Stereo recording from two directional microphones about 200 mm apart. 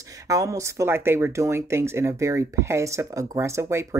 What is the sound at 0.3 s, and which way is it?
Speech, 15° right (ahead or behind).